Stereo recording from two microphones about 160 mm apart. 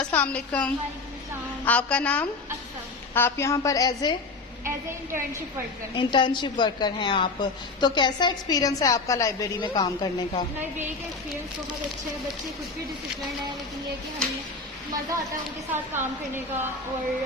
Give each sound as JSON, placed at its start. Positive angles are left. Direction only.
{"t": 0.0, "sound": "a woman's voice", "side_deg": 10}
{"t": 4.6, "sound": "a woman's voice", "side_deg": -15}
{"t": 6.0, "sound": "a woman's voice", "side_deg": 30}
{"t": 15.7, "sound": "a woman's voice", "side_deg": -15}